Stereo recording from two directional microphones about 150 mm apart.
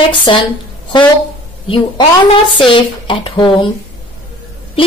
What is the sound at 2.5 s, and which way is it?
Speech, 35° left (ahead or behind).